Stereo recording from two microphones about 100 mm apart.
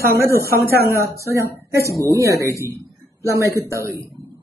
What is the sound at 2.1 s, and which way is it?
Speech, 30° right (ahead or behind).